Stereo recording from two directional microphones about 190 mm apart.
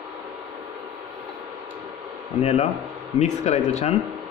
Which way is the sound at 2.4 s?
35° left (ahead or behind).